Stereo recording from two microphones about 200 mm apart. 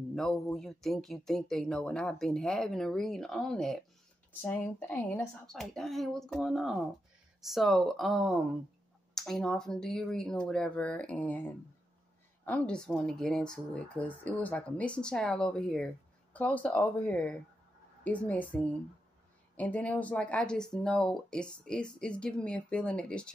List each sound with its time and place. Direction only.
0.1 s speech: centre (ahead or behind)